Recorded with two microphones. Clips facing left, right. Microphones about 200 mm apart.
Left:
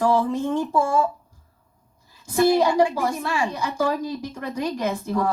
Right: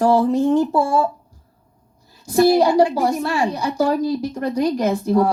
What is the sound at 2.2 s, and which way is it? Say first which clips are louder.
A woman's voice: right 4 dB; 35° right (ahead or behind).